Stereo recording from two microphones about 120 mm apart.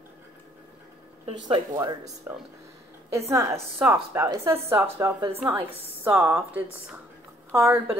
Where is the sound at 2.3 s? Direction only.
15° right (ahead or behind).